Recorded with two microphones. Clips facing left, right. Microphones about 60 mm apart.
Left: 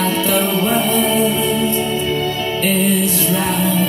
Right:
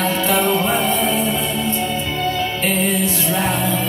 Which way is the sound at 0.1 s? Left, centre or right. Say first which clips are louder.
Even; right.